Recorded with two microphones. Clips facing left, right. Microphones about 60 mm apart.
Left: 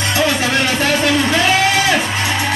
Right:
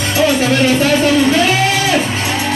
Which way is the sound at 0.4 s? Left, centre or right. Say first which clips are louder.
Right 4 dB; left.